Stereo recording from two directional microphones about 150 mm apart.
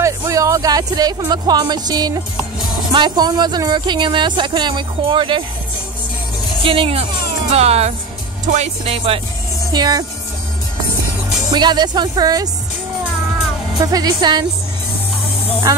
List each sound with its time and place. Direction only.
0.0 s a sound: 20° right (ahead or behind)
1.3 s speech: 30° right (ahead or behind)
6.6 s speech: 35° right (ahead or behind)
9.7 s speech: 25° right (ahead or behind)
11.5 s speech: 30° right (ahead or behind)
13.7 s speech: 25° right (ahead or behind)